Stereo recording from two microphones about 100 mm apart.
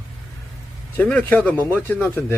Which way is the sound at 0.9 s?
15° left (ahead or behind).